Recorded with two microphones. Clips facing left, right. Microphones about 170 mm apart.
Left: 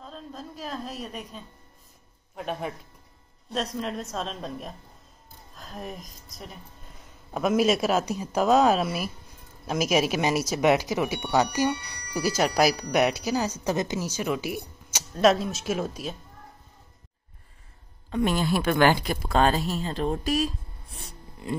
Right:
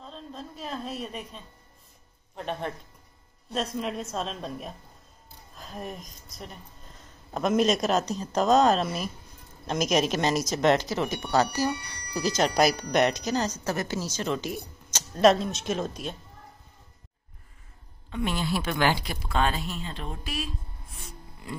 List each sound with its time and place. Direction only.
0.0 s a woman's voice: 5° left (ahead or behind)
18.1 s speech: 45° left (ahead or behind)